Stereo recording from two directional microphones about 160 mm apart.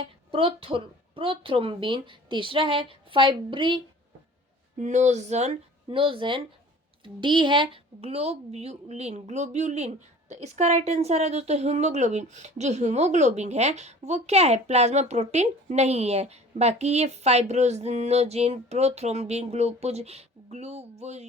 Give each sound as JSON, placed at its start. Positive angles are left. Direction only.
{"t": 0.0, "sound": "a woman's voice", "side_deg": -35}
{"t": 4.8, "sound": "speech", "side_deg": -45}